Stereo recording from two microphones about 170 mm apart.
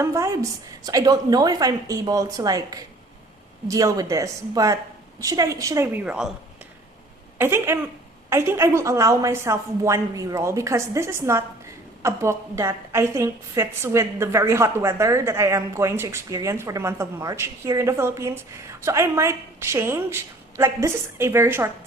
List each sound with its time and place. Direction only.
0.0 s a woman's voice: 15° right (ahead or behind)
7.3 s a woman's voice: 15° right (ahead or behind)